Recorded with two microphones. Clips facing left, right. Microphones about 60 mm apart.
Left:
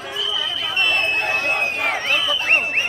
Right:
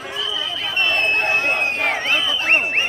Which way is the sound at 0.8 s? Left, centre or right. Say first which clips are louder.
Right 2 dB; right.